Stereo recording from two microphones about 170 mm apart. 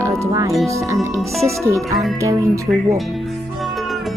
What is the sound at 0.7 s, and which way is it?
Speech, 15° right (ahead or behind).